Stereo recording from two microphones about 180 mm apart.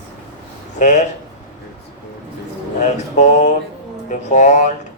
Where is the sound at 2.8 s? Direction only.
40° left (ahead or behind).